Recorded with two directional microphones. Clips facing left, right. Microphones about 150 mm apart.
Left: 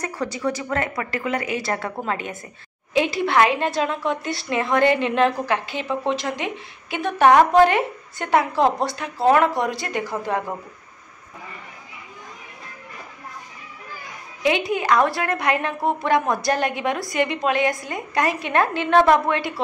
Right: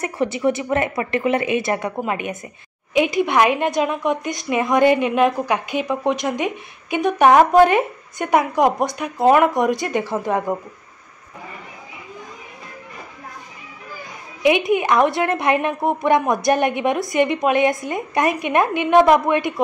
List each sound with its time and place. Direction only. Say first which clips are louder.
0.0 s a woman's voice: right 5 dB; 25° right (ahead or behind)
14.4 s a woman's voice: right 5 dB; 20° right (ahead or behind)